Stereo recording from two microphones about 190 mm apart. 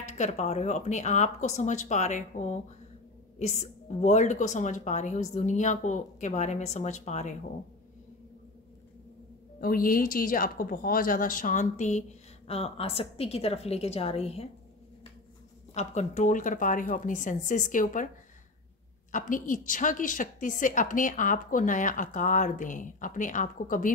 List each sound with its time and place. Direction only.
0.0 s a woman's voice: 35° left (ahead or behind)
9.6 s a woman's voice: 50° left (ahead or behind); by 14.5 s 35° left (ahead or behind)
15.7 s a woman's voice: 35° left (ahead or behind)
19.1 s a woman's voice: 45° left (ahead or behind)